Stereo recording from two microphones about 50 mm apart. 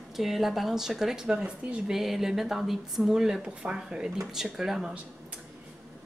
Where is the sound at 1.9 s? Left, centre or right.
Centre.